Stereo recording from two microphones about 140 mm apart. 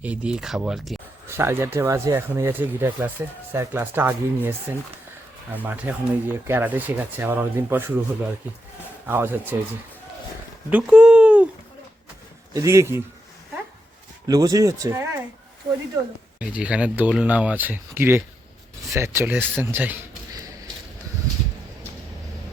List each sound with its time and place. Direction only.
0.0 s speech: 10° right (ahead or behind)
1.3 s speech: 15° right (ahead or behind)
9.0 s speech: 15° right (ahead or behind)
10.7 s speech: 10° right (ahead or behind)
12.5 s speech: 20° right (ahead or behind)
14.3 s speech: 25° right (ahead or behind)
16.4 s speech: 10° right (ahead or behind)